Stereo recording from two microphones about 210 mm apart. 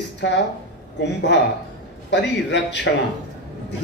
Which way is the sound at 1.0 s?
55° left (ahead or behind).